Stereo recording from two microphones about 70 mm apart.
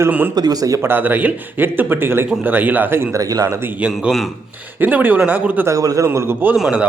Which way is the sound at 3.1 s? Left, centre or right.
Right.